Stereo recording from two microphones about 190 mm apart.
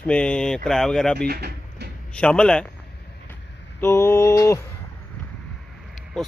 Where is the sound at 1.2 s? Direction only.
55° right (ahead or behind).